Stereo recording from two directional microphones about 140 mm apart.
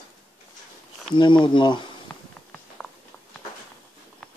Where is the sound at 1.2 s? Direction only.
35° left (ahead or behind).